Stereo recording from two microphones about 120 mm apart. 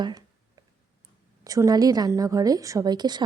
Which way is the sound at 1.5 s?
30° right (ahead or behind).